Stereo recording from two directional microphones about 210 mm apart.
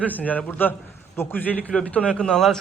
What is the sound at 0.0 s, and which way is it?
A man's voice, 5° left (ahead or behind).